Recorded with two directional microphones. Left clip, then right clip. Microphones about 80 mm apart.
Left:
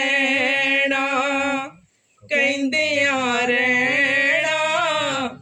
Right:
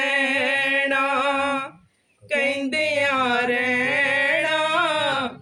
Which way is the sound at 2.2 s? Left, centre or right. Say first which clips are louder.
Left 3 dB; right.